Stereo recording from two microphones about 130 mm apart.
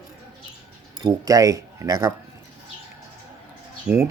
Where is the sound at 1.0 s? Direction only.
30° right (ahead or behind).